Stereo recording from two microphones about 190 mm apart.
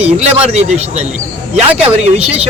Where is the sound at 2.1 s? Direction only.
30° right (ahead or behind).